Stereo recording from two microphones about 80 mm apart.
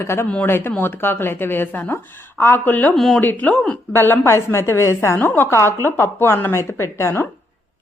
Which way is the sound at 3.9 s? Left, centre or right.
Left.